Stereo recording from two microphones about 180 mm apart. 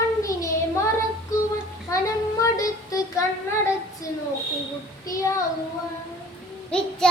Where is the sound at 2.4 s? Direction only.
20° left (ahead or behind).